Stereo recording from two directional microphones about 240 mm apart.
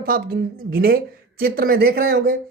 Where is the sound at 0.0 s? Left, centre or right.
Right.